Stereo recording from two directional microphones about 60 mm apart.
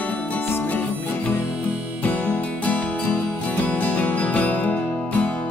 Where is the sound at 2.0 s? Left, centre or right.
Left.